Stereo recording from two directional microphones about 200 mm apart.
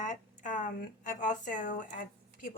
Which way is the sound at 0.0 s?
40° left (ahead or behind).